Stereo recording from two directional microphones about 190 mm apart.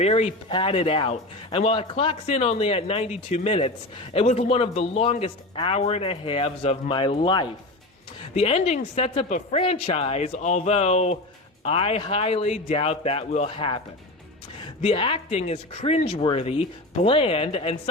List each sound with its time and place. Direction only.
0.0 s speech: 35° left (ahead or behind)